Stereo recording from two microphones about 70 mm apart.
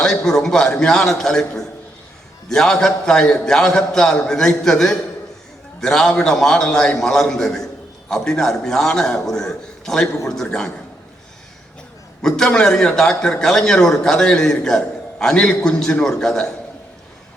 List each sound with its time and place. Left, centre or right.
0.3 s a man's voice: centre
12.2 s a man's voice: centre